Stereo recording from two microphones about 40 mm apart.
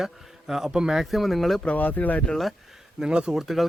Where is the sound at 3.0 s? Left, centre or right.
Right.